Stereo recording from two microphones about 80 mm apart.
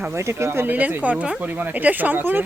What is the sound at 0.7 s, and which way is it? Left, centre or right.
Speech, centre.